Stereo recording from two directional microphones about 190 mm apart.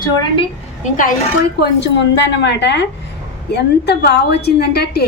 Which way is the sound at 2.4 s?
65° left (ahead or behind).